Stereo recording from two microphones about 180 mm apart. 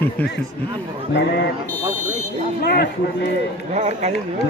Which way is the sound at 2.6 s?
65° left (ahead or behind).